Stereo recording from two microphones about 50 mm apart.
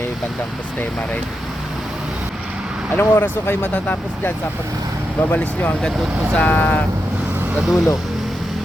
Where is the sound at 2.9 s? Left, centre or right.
Left.